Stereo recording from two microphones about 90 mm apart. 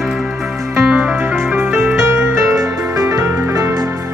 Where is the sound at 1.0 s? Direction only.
15° right (ahead or behind).